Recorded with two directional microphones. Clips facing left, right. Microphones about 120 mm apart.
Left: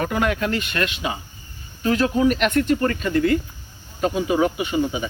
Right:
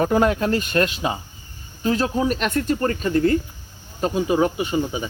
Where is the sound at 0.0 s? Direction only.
30° right (ahead or behind).